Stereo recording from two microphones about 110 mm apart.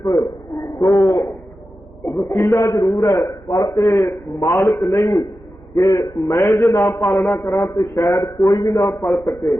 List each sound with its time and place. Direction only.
0.0 s a man's voice: 30° left (ahead or behind)
2.4 s a man's voice: 35° left (ahead or behind)
4.1 s a man's voice: 25° left (ahead or behind)
4.9 s a man's voice: 35° left (ahead or behind)
6.9 s a man's voice: 25° left (ahead or behind)